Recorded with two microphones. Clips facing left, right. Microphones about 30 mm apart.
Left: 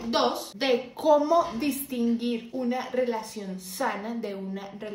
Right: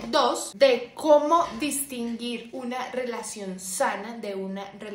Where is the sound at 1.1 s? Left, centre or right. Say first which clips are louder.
Right 3 dB; right.